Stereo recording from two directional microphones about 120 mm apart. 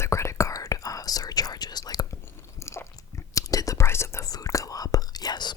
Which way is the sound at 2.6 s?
25° left (ahead or behind).